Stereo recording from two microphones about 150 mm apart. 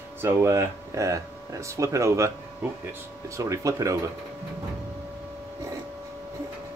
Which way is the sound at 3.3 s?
20° right (ahead or behind).